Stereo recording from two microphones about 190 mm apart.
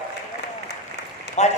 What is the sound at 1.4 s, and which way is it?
Speech, 35° left (ahead or behind).